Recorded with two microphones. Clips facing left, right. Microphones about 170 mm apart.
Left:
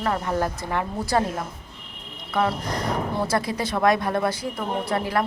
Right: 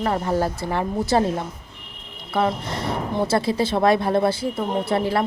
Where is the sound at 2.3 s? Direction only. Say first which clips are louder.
Right 1 dB; 25° right (ahead or behind).